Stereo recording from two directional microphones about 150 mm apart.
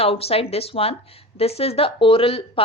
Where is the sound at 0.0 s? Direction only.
40° left (ahead or behind).